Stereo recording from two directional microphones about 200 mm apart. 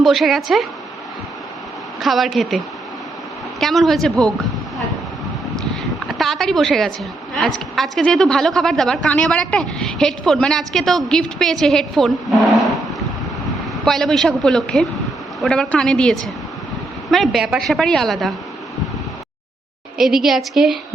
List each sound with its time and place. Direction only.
0.0 s a woman's voice: centre (ahead or behind)
2.0 s a woman's voice: centre (ahead or behind)
6.1 s a woman's voice: centre (ahead or behind)
12.6 s a sound: centre (ahead or behind)
13.8 s a woman's voice: centre (ahead or behind)
20.0 s a woman's voice: centre (ahead or behind)